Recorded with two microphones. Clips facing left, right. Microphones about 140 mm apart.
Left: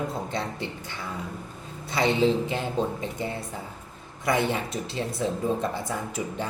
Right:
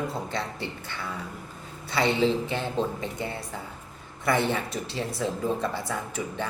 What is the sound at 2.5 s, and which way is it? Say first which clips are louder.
Speech: left 1 dB; 15° left (ahead or behind).